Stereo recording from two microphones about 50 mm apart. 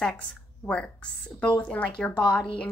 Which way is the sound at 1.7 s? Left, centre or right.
Left.